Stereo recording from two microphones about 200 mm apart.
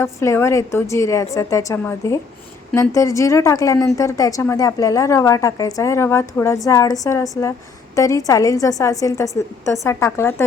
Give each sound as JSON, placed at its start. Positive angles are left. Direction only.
{"t": 0.0, "sound": "a woman's voice", "side_deg": 15}